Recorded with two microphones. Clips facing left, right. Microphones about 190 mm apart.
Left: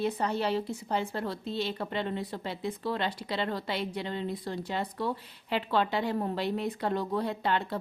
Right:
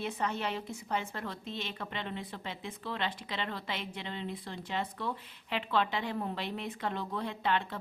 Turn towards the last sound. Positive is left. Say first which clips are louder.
# left 3 dB
turn(degrees=40)  # may be behind; listen again after turning